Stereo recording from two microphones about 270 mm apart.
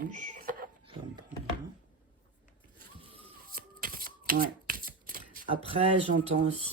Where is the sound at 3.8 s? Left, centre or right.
Right.